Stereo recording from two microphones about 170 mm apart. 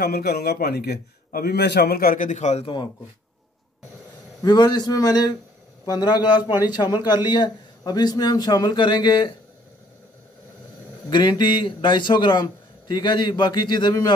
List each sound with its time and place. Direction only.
0.0 s a man's voice: 65° left (ahead or behind); by 2.9 s 30° left (ahead or behind)
4.4 s a man's voice: 25° left (ahead or behind)
11.1 s a man's voice: 25° left (ahead or behind)